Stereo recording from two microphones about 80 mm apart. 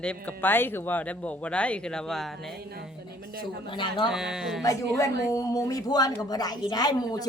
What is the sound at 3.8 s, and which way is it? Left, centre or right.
Speech, left.